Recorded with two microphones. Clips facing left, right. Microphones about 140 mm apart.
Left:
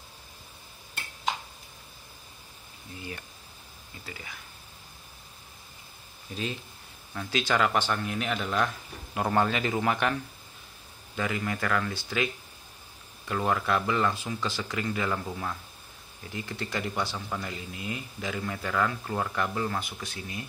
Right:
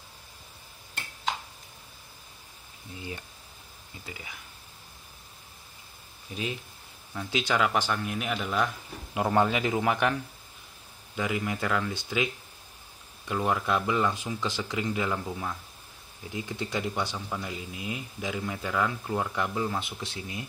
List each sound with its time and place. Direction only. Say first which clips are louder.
3.0 s speech: right 1 dB; 20° right (ahead or behind)
6.3 s speech: even; 15° right (ahead or behind)
11.1 s speech: right 1 dB; 10° right (ahead or behind)
13.3 s speech: even; 15° right (ahead or behind)
16.3 s speech: right 1 dB; 15° right (ahead or behind)
19.8 s speech: right 1 dB; 25° right (ahead or behind)